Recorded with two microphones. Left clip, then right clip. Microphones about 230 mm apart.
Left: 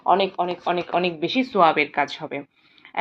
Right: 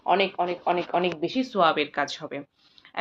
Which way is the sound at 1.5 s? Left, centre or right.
Centre.